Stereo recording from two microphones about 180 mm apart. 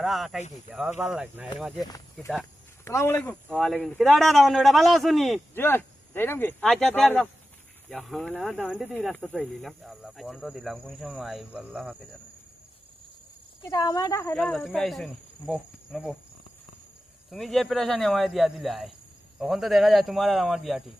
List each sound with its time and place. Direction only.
0.0 s speech: centre (ahead or behind)
1.8 s speech: 20° left (ahead or behind); by 5.4 s centre (ahead or behind)
5.5 s speech: 10° left (ahead or behind)
13.6 s speech: 20° left (ahead or behind)
14.3 s speech: 5° left (ahead or behind)
17.3 s speech: centre (ahead or behind)